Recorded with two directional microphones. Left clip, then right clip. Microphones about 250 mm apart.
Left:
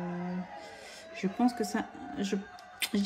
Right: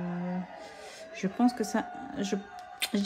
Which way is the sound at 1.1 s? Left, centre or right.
Centre.